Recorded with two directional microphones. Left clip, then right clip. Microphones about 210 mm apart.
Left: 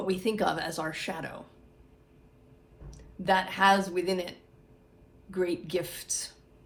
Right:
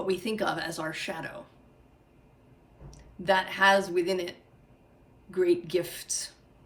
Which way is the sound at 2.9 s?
20° left (ahead or behind).